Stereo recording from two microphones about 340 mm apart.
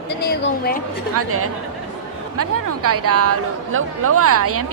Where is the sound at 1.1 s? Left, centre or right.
Right.